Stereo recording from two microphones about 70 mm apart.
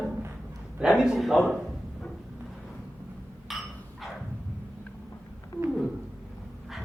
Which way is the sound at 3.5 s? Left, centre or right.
Centre.